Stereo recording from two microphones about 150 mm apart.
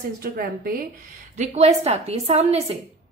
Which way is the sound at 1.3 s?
50° right (ahead or behind).